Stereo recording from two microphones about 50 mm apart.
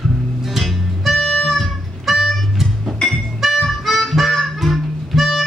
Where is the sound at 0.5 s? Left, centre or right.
Centre.